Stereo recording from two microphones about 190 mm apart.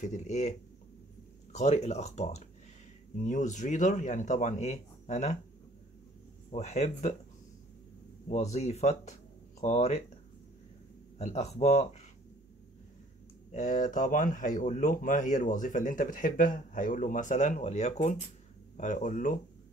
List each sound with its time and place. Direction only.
0.0 s speech: 40° left (ahead or behind)
6.5 s speech: 35° left (ahead or behind)
8.3 s speech: 35° left (ahead or behind)
11.1 s speech: 35° left (ahead or behind)
13.5 s speech: 40° left (ahead or behind)